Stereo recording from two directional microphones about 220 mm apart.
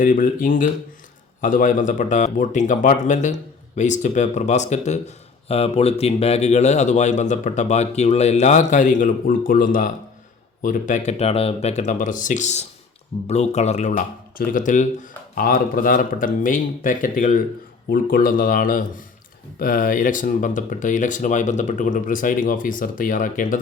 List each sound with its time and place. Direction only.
0.0 s speech: 35° left (ahead or behind)